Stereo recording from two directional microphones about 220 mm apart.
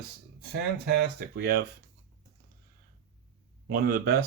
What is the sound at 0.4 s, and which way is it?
Speech, 45° right (ahead or behind).